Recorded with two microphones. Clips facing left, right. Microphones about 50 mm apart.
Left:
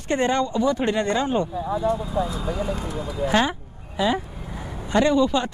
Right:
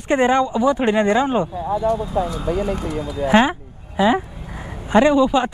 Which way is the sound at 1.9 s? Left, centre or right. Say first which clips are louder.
Right 3 dB; right.